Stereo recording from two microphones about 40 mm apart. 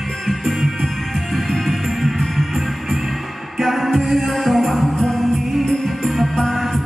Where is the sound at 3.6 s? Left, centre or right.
Centre.